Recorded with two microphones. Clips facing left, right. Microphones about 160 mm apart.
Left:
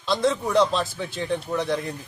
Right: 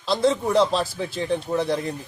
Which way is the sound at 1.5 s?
30° right (ahead or behind).